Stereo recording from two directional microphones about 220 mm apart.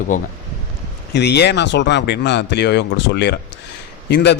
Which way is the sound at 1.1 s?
50° left (ahead or behind).